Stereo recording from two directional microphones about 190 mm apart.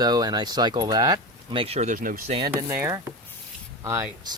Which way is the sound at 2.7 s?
15° right (ahead or behind).